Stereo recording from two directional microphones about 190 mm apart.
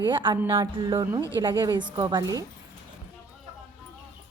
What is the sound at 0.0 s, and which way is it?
A woman's voice, 25° right (ahead or behind).